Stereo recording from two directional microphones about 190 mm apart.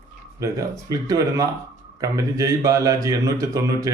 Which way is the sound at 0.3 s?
15° right (ahead or behind).